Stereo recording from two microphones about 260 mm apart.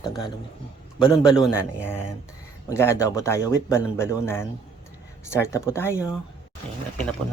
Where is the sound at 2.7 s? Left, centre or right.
Centre.